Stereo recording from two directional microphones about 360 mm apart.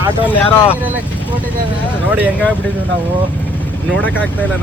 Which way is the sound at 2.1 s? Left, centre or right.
Centre.